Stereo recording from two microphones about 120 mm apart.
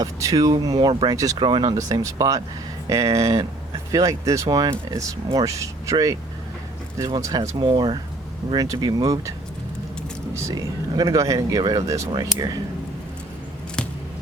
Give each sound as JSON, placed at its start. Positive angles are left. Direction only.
{"t": 0.0, "sound": "speech", "side_deg": -30}
{"t": 10.3, "sound": "speech", "side_deg": -30}